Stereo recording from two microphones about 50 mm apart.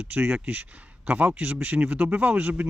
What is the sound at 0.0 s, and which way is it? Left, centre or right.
Speech, right.